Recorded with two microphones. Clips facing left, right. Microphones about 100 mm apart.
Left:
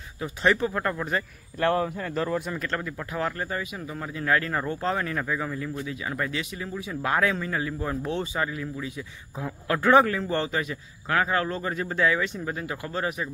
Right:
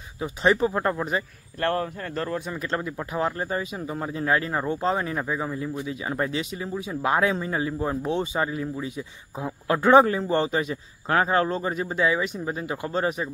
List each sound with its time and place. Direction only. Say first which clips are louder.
0.2 s speech: right 2 dB; 20° right (ahead or behind)
1.6 s speech: left 2 dB; 10° left (ahead or behind)
2.5 s speech: right 2 dB; 20° right (ahead or behind)